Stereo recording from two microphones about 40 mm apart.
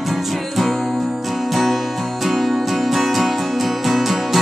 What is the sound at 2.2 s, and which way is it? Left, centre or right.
Music, centre.